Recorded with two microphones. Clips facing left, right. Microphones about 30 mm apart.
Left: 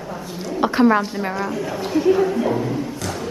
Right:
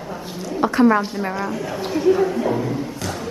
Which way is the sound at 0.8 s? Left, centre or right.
Centre.